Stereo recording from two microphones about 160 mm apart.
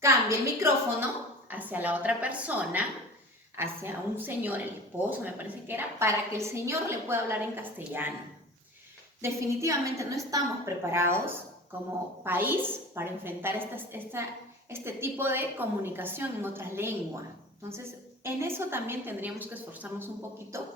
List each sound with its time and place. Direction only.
0.0 s a woman's voice: 15° right (ahead or behind)
9.2 s a woman's voice: 20° right (ahead or behind)
18.2 s a woman's voice: 15° right (ahead or behind)